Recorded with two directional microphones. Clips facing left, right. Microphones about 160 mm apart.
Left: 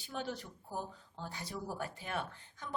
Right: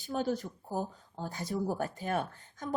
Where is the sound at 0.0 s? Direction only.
40° right (ahead or behind).